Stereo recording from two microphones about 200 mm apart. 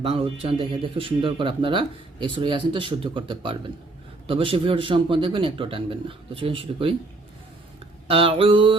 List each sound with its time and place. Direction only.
0.0 s speech: 30° right (ahead or behind)
8.0 s speech: 25° right (ahead or behind)